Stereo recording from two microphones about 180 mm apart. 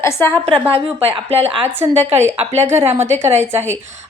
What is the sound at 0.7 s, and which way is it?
Speech, 30° right (ahead or behind).